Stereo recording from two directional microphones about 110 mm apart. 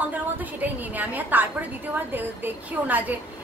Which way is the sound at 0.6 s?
15° right (ahead or behind).